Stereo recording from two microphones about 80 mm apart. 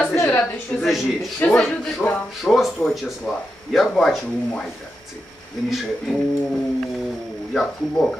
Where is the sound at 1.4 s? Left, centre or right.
Left.